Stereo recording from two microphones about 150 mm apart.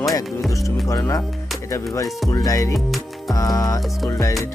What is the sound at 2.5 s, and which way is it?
Speech, 20° left (ahead or behind).